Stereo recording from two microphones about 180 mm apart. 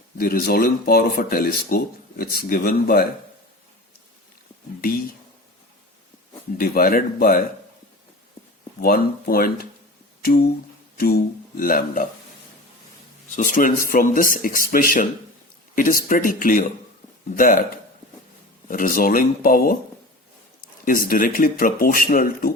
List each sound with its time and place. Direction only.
0.2 s speech: 55° left (ahead or behind)
6.6 s speech: 55° left (ahead or behind)
8.8 s speech: 55° left (ahead or behind)
11.0 s speech: 55° left (ahead or behind)
13.3 s speech: 45° left (ahead or behind)
18.7 s speech: 50° left (ahead or behind)
20.8 s speech: 50° left (ahead or behind)